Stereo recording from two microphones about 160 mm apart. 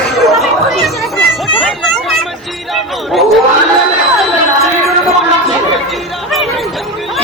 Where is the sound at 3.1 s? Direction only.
Centre (ahead or behind).